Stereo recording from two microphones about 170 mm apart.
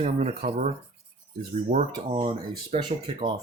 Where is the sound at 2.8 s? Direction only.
30° right (ahead or behind).